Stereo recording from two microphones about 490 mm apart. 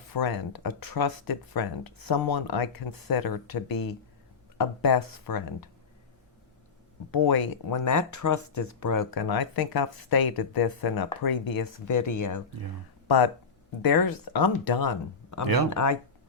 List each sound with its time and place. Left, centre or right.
0.1 s speech: left
7.1 s speech: left
13.1 s speech: left